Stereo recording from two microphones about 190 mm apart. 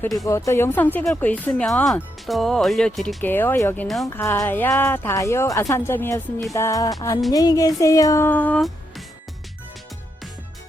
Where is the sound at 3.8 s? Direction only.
Centre (ahead or behind).